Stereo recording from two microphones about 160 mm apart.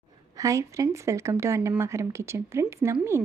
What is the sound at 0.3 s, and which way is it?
A woman's voice, 20° right (ahead or behind).